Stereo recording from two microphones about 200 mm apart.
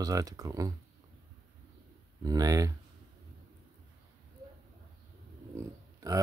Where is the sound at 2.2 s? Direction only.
20° right (ahead or behind).